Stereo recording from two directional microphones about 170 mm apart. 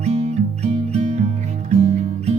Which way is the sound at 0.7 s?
35° right (ahead or behind).